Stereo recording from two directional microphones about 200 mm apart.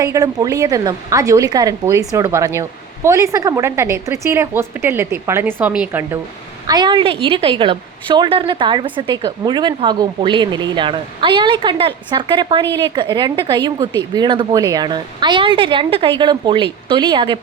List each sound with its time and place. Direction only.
0.0 s speech: 15° right (ahead or behind)
6.7 s a woman's voice: 20° right (ahead or behind)